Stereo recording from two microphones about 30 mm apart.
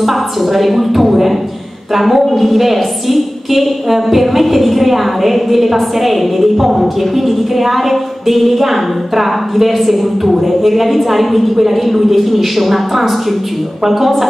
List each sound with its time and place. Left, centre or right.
0.0 s a woman's voice: centre